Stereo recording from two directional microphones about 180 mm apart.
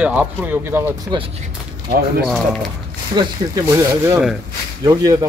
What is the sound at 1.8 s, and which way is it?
Speech, 55° right (ahead or behind).